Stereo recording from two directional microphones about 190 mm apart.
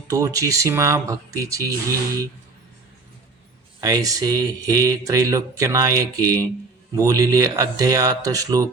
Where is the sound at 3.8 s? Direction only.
20° right (ahead or behind).